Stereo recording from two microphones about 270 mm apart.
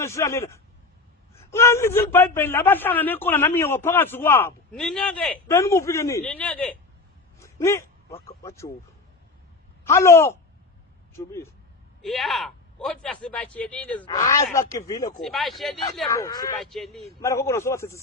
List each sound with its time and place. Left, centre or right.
0.0 s a man's voice: centre
7.3 s a sound: centre
8.3 s a man's voice: centre
9.8 s a man's voice: centre
15.2 s speech: centre
16.0 s a man's voice: centre
16.6 s a man's voice: centre